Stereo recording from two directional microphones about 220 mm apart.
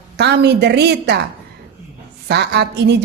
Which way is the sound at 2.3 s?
50° right (ahead or behind).